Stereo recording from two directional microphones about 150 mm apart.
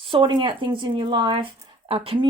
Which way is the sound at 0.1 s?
35° right (ahead or behind).